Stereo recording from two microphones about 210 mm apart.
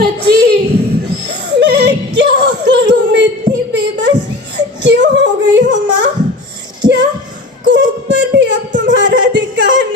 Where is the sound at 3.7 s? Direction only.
55° right (ahead or behind).